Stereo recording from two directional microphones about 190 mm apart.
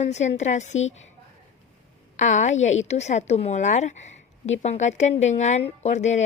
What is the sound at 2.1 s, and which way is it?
Speech, 40° left (ahead or behind).